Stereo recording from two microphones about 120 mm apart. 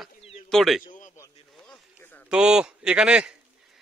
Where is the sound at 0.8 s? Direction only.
90° left.